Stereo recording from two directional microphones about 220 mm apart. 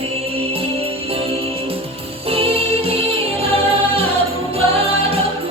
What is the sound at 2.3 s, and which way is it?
Music, 25° right (ahead or behind).